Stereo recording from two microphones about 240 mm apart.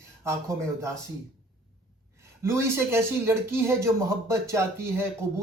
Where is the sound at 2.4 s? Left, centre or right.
Centre.